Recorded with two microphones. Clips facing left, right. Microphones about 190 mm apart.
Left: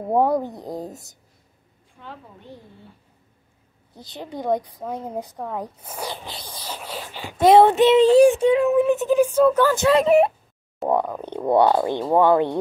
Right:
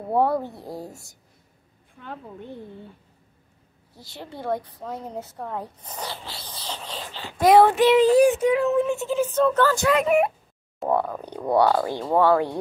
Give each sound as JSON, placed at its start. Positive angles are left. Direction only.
{"t": 0.1, "sound": "a woman's voice", "side_deg": 15}
{"t": 3.9, "sound": "a woman's voice", "side_deg": 20}
{"t": 7.4, "sound": "speech", "side_deg": 25}
{"t": 8.6, "sound": "a woman's voice", "side_deg": 15}
{"t": 9.8, "sound": "speech", "side_deg": 30}
{"t": 10.9, "sound": "speech", "side_deg": 15}